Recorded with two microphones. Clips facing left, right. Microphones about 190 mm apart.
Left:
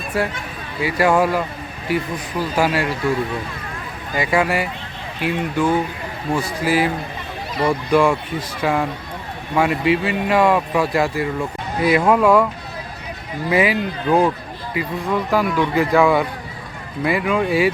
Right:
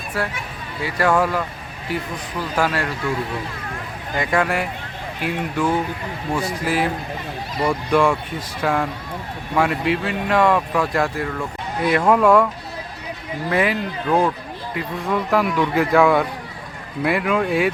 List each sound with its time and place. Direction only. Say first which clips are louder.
0.8 s speech: left 2 dB; 10° left (ahead or behind)
4.1 s speech: left 2 dB; 5° left (ahead or behind)
13.5 s speech: left 3 dB; 5° left (ahead or behind)